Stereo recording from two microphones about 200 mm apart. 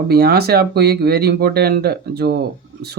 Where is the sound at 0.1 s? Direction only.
50° right (ahead or behind).